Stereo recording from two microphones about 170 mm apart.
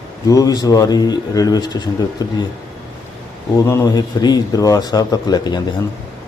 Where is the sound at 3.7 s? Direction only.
20° left (ahead or behind).